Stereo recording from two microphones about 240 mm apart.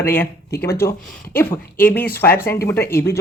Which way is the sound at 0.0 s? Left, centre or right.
Centre.